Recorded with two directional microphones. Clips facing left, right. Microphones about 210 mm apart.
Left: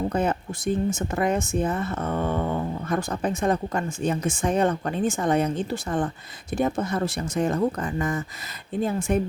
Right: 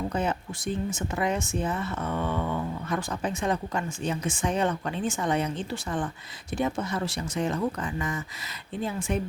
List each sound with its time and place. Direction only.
0.1 s speech: 50° left (ahead or behind)